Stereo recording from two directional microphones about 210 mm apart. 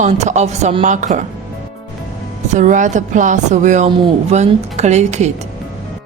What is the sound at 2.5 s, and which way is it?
Speech, 35° right (ahead or behind).